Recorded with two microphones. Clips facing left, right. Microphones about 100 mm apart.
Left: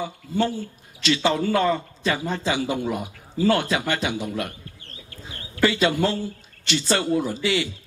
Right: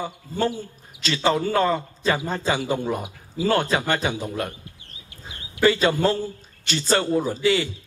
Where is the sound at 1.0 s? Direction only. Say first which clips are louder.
Even; 40° right (ahead or behind).